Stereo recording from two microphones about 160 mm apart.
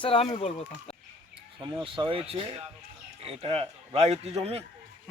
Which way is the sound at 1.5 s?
30° right (ahead or behind).